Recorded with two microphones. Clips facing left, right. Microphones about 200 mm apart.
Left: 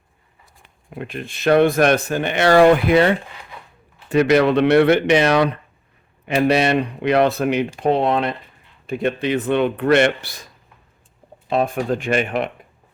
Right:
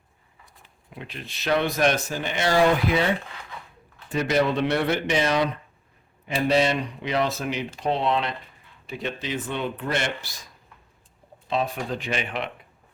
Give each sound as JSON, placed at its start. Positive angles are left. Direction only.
{"t": 0.6, "sound": "speech", "side_deg": 55}
{"t": 11.4, "sound": "speech", "side_deg": 55}